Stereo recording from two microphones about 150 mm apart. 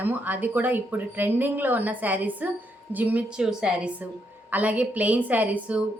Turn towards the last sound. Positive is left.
turn(degrees=-10)  # may be behind; listen again after turning